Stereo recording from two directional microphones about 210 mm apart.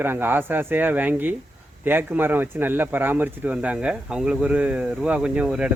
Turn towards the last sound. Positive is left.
turn(degrees=-5)  # may be behind; listen again after turning